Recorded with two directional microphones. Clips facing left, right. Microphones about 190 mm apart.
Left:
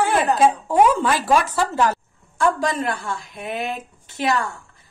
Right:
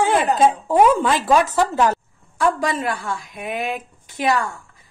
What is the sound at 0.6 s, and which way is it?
A woman's voice, 15° right (ahead or behind).